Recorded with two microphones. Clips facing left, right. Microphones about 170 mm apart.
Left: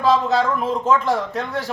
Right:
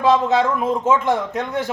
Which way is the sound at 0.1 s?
20° right (ahead or behind).